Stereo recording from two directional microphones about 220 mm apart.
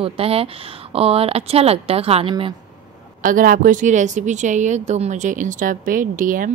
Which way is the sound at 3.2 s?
40° right (ahead or behind).